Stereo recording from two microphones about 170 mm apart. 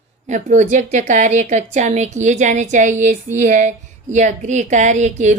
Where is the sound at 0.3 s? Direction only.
45° right (ahead or behind).